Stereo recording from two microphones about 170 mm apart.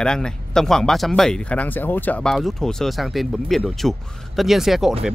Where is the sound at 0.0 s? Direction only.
5° left (ahead or behind).